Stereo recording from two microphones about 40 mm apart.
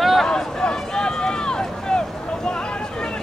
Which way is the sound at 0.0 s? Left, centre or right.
Centre.